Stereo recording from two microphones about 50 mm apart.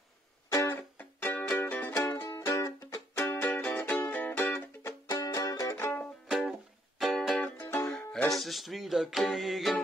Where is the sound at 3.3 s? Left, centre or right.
Left.